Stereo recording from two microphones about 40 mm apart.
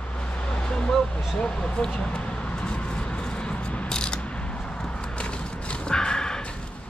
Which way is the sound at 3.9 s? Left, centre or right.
Left.